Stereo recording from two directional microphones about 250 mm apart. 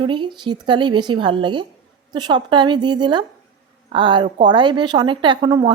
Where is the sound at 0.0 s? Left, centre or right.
Centre.